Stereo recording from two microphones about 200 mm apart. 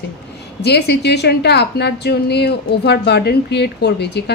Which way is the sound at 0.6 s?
55° left (ahead or behind).